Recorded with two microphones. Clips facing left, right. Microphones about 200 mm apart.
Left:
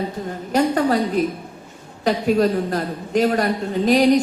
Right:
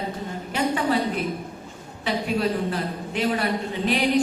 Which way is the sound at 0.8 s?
40° left (ahead or behind).